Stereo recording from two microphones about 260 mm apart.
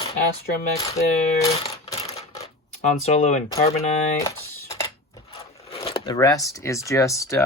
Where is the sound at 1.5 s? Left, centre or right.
Left.